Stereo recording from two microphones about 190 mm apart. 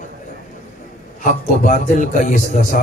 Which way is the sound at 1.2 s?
45° left (ahead or behind).